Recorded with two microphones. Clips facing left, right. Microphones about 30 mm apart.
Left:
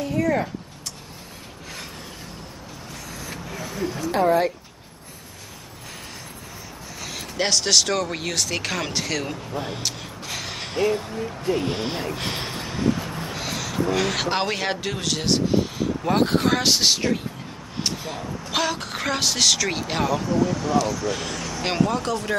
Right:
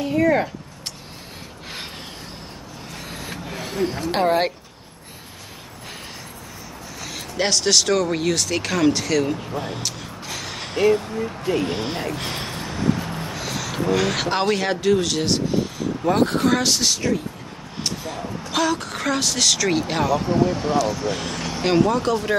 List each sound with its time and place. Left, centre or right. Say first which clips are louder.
0.0 s a sound: right 4 dB; right
3.1 s vehicle: right 2 dB; right
7.0 s speech: right 2 dB; centre
10.9 s speech: right 5 dB; right
11.6 s speech: right 1 dB; centre
12.2 s a sound: even; centre
13.2 s vehicle: right 1 dB; centre
13.9 s speech: right 3 dB; centre
16.8 s speech: left 1 dB; left
17.8 s speech: right 1 dB; centre
20.2 s speech: right 2 dB; right
21.1 s speech: right 1 dB; centre
21.4 s vehicle: right 2 dB; right
21.6 s speech: right 5 dB; centre